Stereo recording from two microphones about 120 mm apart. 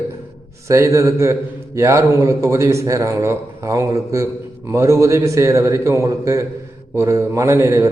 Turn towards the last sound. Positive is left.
turn(degrees=-25)  # may be behind; listen again after turning